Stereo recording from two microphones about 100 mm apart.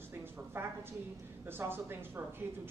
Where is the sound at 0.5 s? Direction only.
20° right (ahead or behind).